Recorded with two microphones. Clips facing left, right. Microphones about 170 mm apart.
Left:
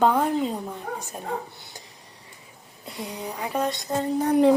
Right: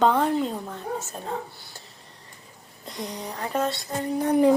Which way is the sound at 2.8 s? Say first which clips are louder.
Even; 5° left (ahead or behind).